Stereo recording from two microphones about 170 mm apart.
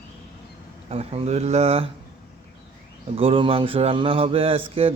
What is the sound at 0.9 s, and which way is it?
Speech, 35° right (ahead or behind).